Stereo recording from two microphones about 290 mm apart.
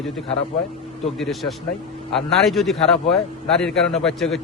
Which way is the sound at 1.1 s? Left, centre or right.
Centre.